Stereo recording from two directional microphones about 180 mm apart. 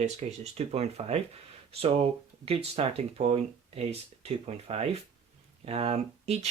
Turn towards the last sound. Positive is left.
turn(degrees=-35)  # may be behind; listen again after turning